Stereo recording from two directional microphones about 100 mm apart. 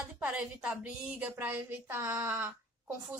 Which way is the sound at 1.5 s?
25° right (ahead or behind).